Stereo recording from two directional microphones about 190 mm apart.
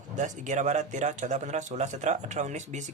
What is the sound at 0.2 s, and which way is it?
A man's voice, 40° right (ahead or behind).